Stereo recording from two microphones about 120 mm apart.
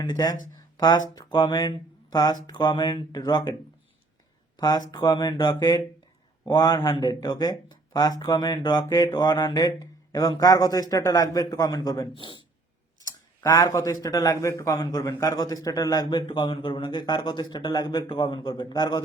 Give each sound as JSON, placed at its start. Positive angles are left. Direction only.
{"t": 0.0, "sound": "a man's voice", "side_deg": 35}
{"t": 4.5, "sound": "a man's voice", "side_deg": 30}
{"t": 12.1, "sound": "a man's voice", "side_deg": 45}
{"t": 13.4, "sound": "a man's voice", "side_deg": 30}